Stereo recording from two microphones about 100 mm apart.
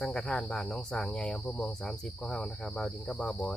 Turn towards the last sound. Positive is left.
turn(degrees=10)  # may be behind; listen again after turning